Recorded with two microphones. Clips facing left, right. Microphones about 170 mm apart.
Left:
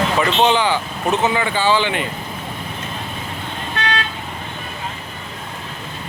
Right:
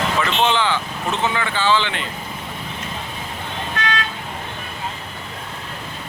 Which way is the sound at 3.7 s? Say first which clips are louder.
Left 2 dB; 35° left (ahead or behind).